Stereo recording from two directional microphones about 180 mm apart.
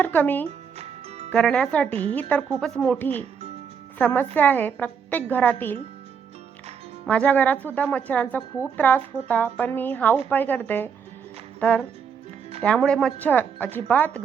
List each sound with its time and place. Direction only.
0.0 s a woman's voice: 10° left (ahead or behind)
0.4 s music: 35° right (ahead or behind)
1.3 s speech: 5° left (ahead or behind)
1.9 s a woman's voice: 35° right (ahead or behind)
2.6 s a woman's voice: 5° left (ahead or behind)
7.0 s a woman's voice: 5° left (ahead or behind)